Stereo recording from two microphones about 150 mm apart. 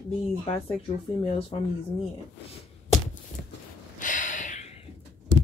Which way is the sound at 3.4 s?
20° right (ahead or behind).